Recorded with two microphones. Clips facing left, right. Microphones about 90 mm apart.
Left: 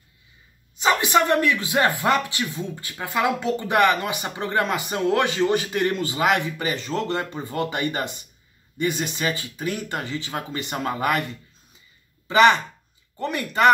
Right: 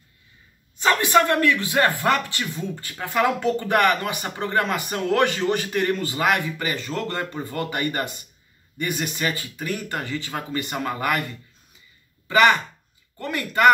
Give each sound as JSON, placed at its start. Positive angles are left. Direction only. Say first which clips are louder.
{"t": 0.7, "sound": "speech", "louder": "right 1 dB", "side_deg": 20}
{"t": 12.3, "sound": "speech", "louder": "left 1 dB", "side_deg": 25}